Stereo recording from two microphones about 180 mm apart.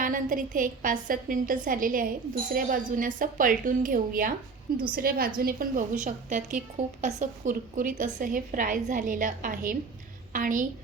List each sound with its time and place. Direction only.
0.0 s a woman's voice: 50° right (ahead or behind)